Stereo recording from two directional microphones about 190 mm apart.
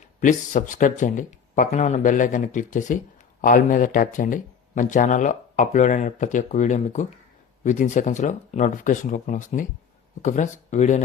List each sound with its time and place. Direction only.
0.2 s speech: 40° left (ahead or behind)